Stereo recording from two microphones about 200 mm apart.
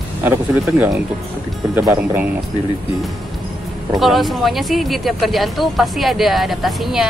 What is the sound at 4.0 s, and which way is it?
Speech, centre (ahead or behind).